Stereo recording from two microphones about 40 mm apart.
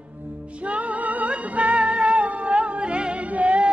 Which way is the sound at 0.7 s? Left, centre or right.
Right.